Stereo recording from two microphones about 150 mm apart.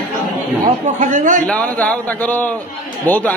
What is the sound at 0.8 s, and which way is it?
Speech, 55° right (ahead or behind).